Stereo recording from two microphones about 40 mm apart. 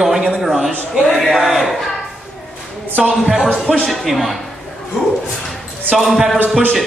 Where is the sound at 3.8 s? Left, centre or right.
Centre.